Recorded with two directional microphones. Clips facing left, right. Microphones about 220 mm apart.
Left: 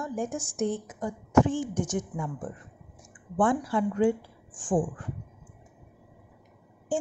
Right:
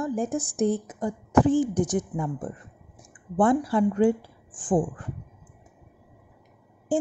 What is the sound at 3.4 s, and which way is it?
A woman's voice, 40° right (ahead or behind).